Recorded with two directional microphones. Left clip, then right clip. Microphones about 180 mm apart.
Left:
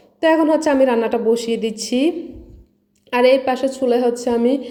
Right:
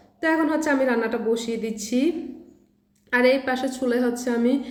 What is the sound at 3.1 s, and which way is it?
A woman's voice, 20° left (ahead or behind).